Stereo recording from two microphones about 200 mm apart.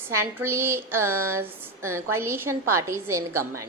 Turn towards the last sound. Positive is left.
turn(degrees=-15)  # may be behind; listen again after turning